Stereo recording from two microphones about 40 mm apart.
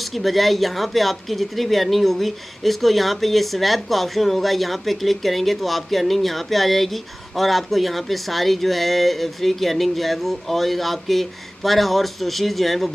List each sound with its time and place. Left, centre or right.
0.0 s speech: centre